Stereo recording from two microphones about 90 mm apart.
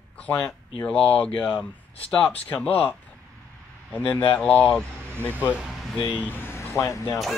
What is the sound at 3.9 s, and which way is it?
Speech, 15° left (ahead or behind).